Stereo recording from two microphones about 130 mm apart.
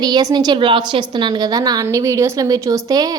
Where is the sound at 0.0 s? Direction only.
30° right (ahead or behind).